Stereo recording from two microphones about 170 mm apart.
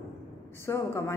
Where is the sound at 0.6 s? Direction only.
15° left (ahead or behind).